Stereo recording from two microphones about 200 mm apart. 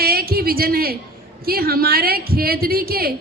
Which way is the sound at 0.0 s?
50° right (ahead or behind).